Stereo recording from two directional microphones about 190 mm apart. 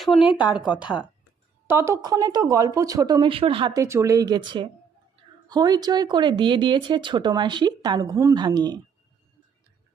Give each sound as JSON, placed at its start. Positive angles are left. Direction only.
{"t": 0.0, "sound": "speech", "side_deg": 0}
{"t": 0.3, "sound": "speech", "side_deg": 25}
{"t": 1.6, "sound": "speech", "side_deg": -15}
{"t": 3.8, "sound": "speech", "side_deg": -15}